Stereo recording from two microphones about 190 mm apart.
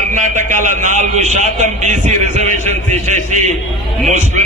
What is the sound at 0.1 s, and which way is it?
A man's voice, 40° right (ahead or behind).